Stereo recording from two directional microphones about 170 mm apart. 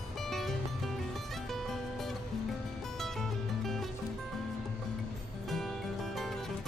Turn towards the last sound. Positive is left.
turn(degrees=0)  # may be behind; listen again after turning